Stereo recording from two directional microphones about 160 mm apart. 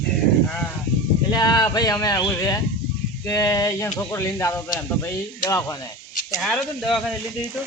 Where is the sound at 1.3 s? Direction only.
25° left (ahead or behind).